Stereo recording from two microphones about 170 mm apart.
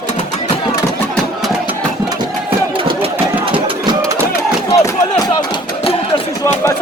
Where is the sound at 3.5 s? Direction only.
30° right (ahead or behind).